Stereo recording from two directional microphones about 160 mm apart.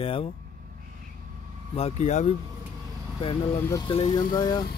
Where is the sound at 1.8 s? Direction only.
40° left (ahead or behind).